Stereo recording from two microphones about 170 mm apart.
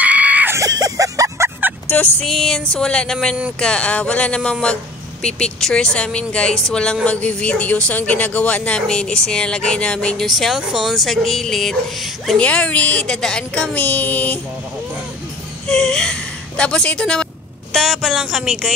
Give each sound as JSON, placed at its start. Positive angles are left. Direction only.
{"t": 0.0, "sound": "music", "side_deg": -10}
{"t": 1.9, "sound": "fowl", "side_deg": 10}
{"t": 2.7, "sound": "a woman's voice", "side_deg": 5}
{"t": 15.7, "sound": "a woman's voice", "side_deg": 5}